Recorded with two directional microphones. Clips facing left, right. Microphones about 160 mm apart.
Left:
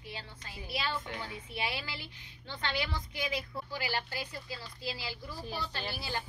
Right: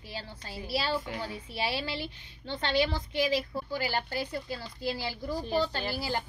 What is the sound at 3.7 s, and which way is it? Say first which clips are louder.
A woman's voice: right 5 dB; 45° right (ahead or behind).